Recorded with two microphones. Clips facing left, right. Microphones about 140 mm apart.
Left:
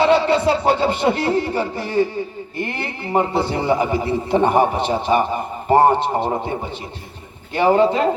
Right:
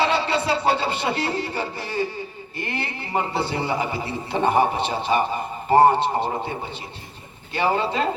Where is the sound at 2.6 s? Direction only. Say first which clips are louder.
Left 3 dB; 55° left (ahead or behind).